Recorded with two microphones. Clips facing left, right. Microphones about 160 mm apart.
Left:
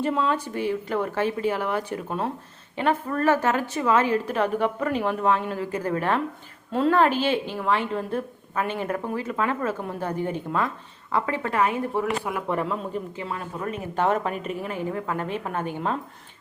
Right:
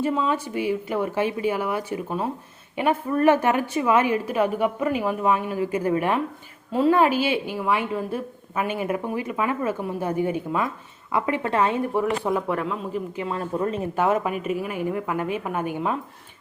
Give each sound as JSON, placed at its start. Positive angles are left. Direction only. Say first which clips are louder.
{"t": 0.0, "sound": "a man's voice", "louder": "right 1 dB", "side_deg": -5}
{"t": 12.2, "sound": "a man's voice", "louder": "right 3 dB", "side_deg": 0}
{"t": 13.3, "sound": "speech", "louder": "right 6 dB", "side_deg": -30}
{"t": 13.9, "sound": "a woman's voice", "louder": "left 1 dB", "side_deg": -10}